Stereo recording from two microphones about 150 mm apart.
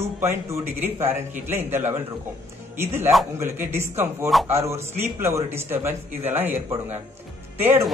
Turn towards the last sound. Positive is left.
turn(degrees=-15)  # may be behind; listen again after turning